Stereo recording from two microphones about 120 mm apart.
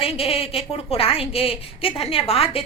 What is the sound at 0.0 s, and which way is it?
A woman's voice, 55° left (ahead or behind).